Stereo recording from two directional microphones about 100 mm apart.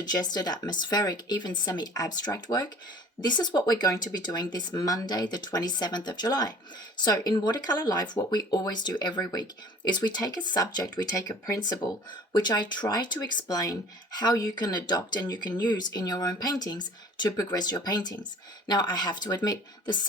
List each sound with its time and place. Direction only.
0.0 s speech: 45° left (ahead or behind)